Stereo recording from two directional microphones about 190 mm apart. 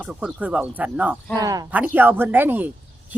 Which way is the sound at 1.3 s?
20° right (ahead or behind).